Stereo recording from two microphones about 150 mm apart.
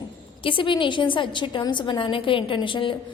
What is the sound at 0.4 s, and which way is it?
A woman's voice, 35° left (ahead or behind).